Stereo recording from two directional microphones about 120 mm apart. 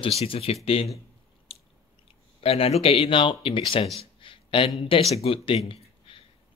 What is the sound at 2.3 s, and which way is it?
Speech, 55° left (ahead or behind).